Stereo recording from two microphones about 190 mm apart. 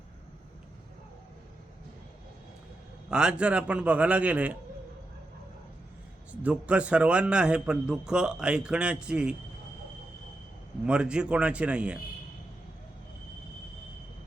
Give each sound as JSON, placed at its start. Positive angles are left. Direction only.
{"t": 3.1, "sound": "a man's voice", "side_deg": -5}
{"t": 6.4, "sound": "a man's voice", "side_deg": -5}
{"t": 10.8, "sound": "a man's voice", "side_deg": -5}